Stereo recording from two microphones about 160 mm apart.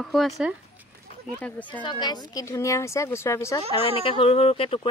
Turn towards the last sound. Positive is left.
turn(degrees=35)  # may be behind; listen again after turning